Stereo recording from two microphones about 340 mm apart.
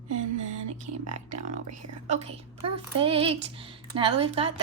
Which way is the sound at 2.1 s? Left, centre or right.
Centre.